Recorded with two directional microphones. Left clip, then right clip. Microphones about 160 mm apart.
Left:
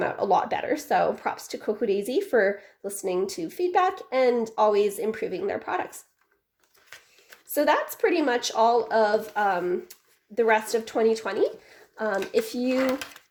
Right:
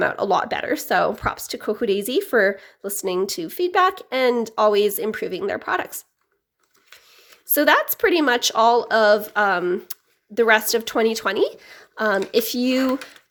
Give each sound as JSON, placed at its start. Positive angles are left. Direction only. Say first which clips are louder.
{"t": 0.0, "sound": "speech", "louder": "right 3 dB", "side_deg": -35}
{"t": 7.5, "sound": "speech", "louder": "right 6 dB", "side_deg": -40}